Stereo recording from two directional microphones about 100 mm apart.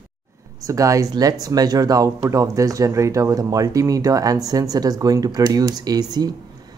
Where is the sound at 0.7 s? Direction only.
35° right (ahead or behind).